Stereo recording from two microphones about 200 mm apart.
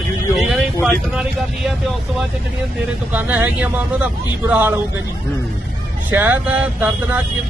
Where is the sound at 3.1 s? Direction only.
10° right (ahead or behind).